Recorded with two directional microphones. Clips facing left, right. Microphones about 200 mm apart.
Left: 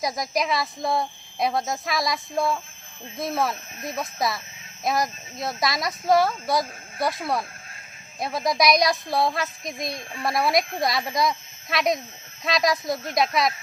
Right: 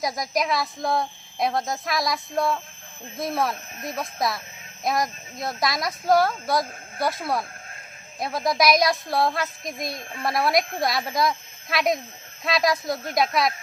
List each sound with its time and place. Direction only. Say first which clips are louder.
0.0 s speech: even; centre (ahead or behind)